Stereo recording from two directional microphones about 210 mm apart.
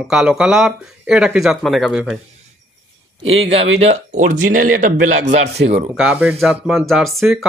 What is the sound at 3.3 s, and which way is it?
Speech, 30° right (ahead or behind).